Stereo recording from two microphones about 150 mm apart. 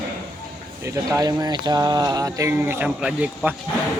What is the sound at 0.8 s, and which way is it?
Speech, 20° right (ahead or behind).